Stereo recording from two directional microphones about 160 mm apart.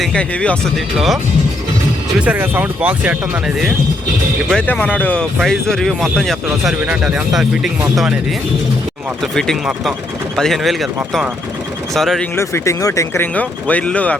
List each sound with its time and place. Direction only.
0.0 s speech: 5° left (ahead or behind)
4.4 s speech: 5° left (ahead or behind)
9.2 s speech: 5° left (ahead or behind)
12.4 s speech: 15° left (ahead or behind)
13.3 s speech: 10° left (ahead or behind)